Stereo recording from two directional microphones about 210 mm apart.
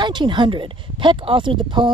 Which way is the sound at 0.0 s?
20° right (ahead or behind).